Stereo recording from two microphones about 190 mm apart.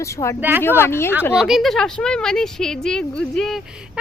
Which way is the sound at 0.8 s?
10° left (ahead or behind).